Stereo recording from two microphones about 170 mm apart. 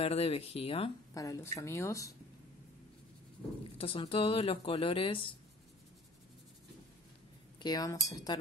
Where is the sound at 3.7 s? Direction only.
35° left (ahead or behind).